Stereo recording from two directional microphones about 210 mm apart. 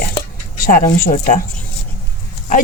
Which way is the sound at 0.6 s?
45° left (ahead or behind).